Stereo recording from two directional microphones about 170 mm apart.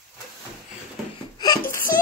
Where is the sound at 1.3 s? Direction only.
20° left (ahead or behind).